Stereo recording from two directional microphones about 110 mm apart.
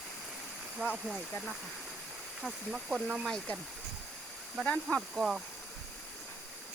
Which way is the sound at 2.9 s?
15° right (ahead or behind).